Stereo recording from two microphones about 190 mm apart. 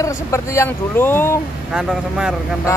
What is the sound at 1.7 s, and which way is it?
Speech, 5° right (ahead or behind).